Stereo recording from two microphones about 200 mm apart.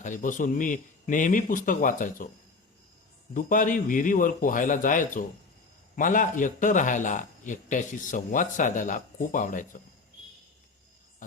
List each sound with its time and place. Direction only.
0.0 s speech: 40° left (ahead or behind)
3.3 s speech: 40° left (ahead or behind)